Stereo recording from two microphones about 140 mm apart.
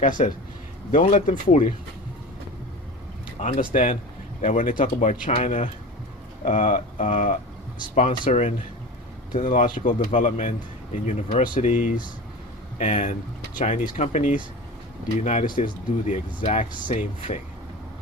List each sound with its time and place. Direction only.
0.0 s speech: 75° left (ahead or behind)
0.9 s speech: 65° left (ahead or behind)
3.2 s speech: 70° left (ahead or behind)
4.4 s speech: 65° left (ahead or behind)
9.3 s speech: 75° left (ahead or behind)